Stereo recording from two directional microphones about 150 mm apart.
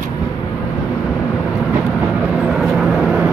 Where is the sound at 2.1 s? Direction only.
5° right (ahead or behind).